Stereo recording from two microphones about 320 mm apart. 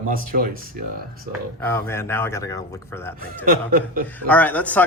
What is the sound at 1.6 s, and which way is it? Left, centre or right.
Speech, centre.